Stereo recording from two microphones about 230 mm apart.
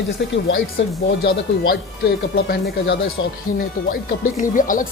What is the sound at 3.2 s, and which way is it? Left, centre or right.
Speech, left.